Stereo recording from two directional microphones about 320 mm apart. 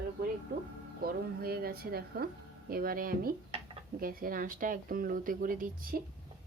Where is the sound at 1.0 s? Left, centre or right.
Right.